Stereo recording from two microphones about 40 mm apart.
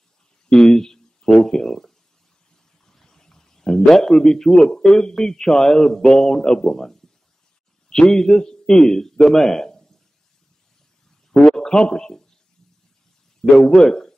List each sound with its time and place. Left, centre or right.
0.6 s speech: centre
2.8 s a sound: centre
4.7 s a man's voice: centre
11.3 s a man's voice: centre
13.4 s a man's voice: centre